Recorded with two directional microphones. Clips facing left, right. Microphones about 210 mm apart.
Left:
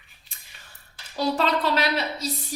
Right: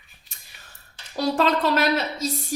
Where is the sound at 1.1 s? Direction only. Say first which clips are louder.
Right 2 dB; 50° right (ahead or behind).